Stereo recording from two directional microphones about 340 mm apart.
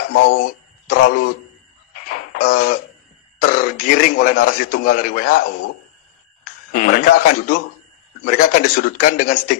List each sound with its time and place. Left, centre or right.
0.1 s speech: left
2.0 s a sound: left
3.4 s a man's voice: left
6.7 s a man's voice: left